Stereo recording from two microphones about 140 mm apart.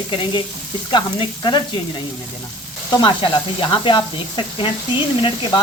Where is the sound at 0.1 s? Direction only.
35° left (ahead or behind).